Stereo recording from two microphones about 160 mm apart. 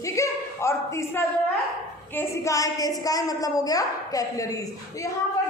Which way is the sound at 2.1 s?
20° left (ahead or behind).